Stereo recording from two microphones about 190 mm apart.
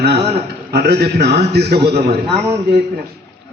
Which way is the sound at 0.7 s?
60° right (ahead or behind).